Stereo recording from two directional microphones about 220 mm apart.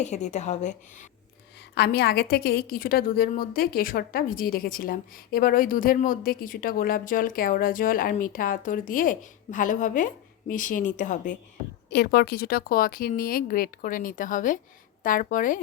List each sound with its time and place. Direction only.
0.0 s a woman's voice: 30° left (ahead or behind)
1.7 s a woman's voice: 45° left (ahead or behind)
11.9 s a woman's voice: 45° left (ahead or behind)